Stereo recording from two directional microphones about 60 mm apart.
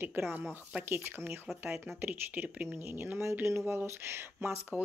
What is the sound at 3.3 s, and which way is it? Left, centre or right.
Speech, right.